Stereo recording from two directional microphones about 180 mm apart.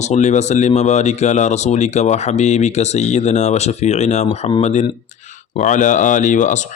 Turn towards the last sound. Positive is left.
turn(degrees=40)  # may be behind; listen again after turning